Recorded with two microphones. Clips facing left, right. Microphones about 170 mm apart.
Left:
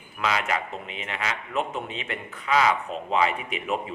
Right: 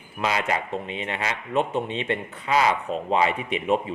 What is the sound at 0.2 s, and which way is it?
A man's voice, 30° right (ahead or behind).